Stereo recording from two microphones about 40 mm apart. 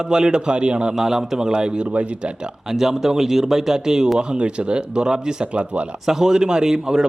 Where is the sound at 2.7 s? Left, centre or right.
Centre.